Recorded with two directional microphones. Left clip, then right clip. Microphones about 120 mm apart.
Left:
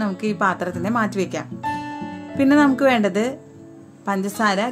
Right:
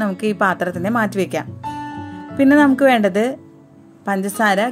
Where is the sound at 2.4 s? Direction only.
30° right (ahead or behind).